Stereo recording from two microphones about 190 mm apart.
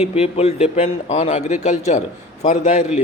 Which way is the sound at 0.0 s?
35° left (ahead or behind).